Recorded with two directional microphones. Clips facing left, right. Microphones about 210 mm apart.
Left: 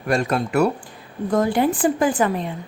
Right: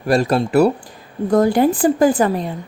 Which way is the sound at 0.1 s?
35° right (ahead or behind).